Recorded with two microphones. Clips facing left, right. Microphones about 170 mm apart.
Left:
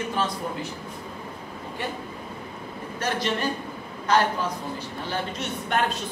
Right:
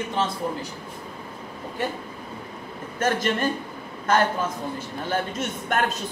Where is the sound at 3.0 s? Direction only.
50° right (ahead or behind).